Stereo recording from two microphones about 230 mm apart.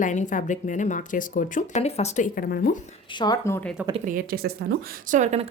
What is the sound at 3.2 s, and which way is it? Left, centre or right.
Speech, centre.